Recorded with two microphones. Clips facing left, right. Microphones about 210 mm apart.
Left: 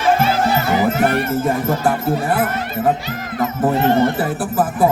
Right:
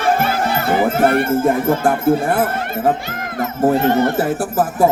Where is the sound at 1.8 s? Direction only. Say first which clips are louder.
Right 3 dB; 50° right (ahead or behind).